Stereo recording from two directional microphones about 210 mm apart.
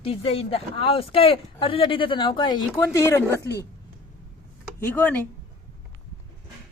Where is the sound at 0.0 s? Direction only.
25° left (ahead or behind).